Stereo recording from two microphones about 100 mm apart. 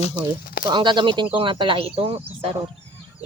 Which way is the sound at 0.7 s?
50° right (ahead or behind).